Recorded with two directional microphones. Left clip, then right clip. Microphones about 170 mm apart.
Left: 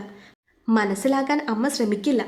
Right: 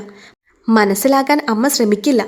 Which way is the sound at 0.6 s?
35° right (ahead or behind).